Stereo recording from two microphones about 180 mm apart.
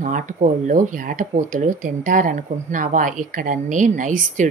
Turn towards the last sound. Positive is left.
turn(degrees=-45)  # may be behind; listen again after turning